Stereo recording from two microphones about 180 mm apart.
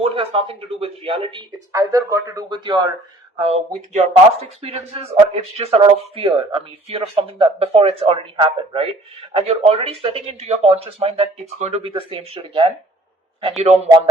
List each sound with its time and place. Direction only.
0.0 s speech: 30° right (ahead or behind)
3.3 s speech: 35° right (ahead or behind)